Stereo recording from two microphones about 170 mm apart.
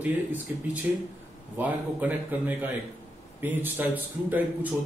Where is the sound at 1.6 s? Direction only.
10° right (ahead or behind).